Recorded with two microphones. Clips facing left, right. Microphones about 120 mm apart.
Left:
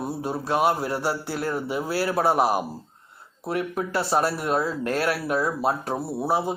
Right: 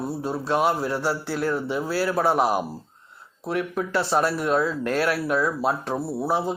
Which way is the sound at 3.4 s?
45° left (ahead or behind).